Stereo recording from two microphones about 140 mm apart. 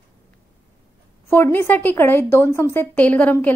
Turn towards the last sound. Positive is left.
turn(degrees=10)  # may be behind; listen again after turning